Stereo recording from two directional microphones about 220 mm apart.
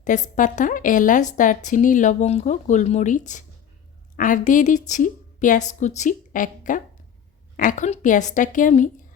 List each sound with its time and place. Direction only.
0.0 s a woman's voice: 35° left (ahead or behind)